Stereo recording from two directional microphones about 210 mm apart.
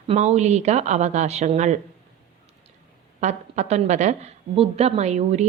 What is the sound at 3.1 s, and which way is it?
A woman's voice, 35° right (ahead or behind).